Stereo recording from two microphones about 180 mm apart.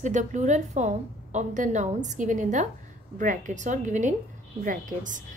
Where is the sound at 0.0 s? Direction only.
40° right (ahead or behind).